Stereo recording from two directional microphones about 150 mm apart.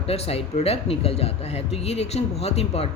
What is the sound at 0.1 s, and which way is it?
Speech, 40° left (ahead or behind).